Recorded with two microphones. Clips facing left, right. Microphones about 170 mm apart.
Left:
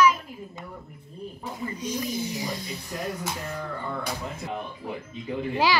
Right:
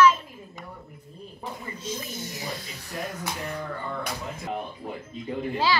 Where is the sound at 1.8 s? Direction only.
15° left (ahead or behind).